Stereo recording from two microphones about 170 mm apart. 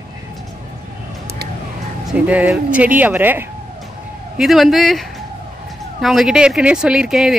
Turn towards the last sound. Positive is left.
turn(degrees=-5)  # may be behind; listen again after turning